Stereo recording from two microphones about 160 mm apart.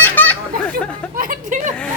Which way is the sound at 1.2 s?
55° right (ahead or behind).